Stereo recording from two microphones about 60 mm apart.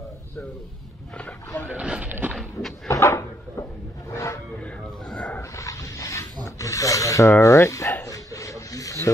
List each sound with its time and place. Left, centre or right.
1.7 s a sound: centre
2.0 s horse: right
2.9 s cupboard open or close: left
4.1 s a sound: left
5.6 s dog: left
6.6 s rub: left
7.2 s dog: left